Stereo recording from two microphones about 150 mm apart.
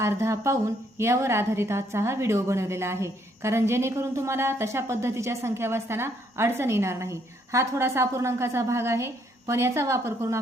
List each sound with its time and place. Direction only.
0.0 s a woman's voice: 20° right (ahead or behind)